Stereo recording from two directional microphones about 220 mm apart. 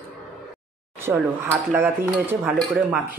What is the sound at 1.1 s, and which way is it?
Speech, 10° right (ahead or behind).